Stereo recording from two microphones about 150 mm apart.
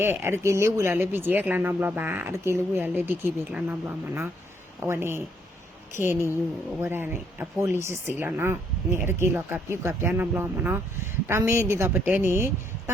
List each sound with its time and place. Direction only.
0.0 s a woman's voice: 15° right (ahead or behind)